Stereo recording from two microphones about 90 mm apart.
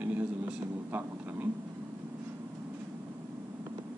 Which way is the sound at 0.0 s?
20° right (ahead or behind).